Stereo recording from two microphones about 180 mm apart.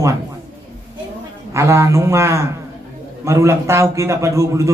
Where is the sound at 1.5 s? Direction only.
15° right (ahead or behind).